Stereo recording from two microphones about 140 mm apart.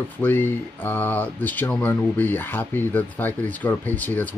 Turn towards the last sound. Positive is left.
turn(degrees=10)  # may be behind; listen again after turning